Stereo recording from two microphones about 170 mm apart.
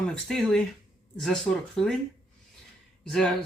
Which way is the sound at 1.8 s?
5° left (ahead or behind).